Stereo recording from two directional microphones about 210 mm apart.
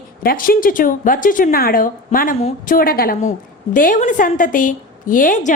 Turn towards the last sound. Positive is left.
turn(degrees=40)  # may be behind; listen again after turning